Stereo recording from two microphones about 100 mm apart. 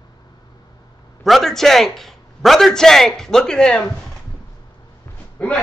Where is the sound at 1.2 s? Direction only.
Centre (ahead or behind).